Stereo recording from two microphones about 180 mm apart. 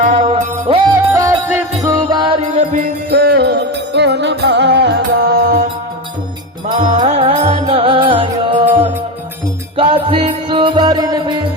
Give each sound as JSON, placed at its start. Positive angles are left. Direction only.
{"t": 0.0, "sound": "music", "side_deg": -40}
{"t": 2.7, "sound": "music", "side_deg": -55}
{"t": 6.7, "sound": "music", "side_deg": -40}
{"t": 9.7, "sound": "music", "side_deg": -30}